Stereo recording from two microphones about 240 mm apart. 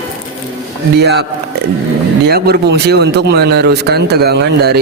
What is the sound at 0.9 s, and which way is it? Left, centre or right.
A man's voice, right.